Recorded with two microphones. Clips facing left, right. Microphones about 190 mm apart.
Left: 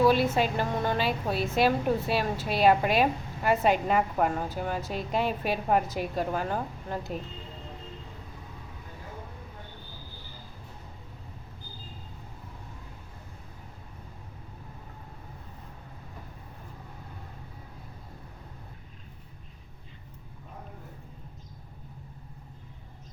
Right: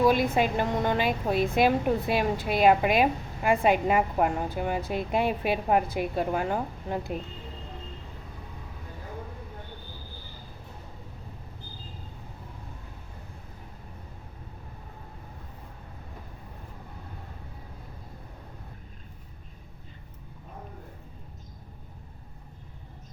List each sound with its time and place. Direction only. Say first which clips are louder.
0.0 s a woman's voice: even; 15° right (ahead or behind)
1.0 s a woman's voice: right 3 dB; 45° right (ahead or behind)
1.5 s a woman's voice: left 1 dB; 15° right (ahead or behind)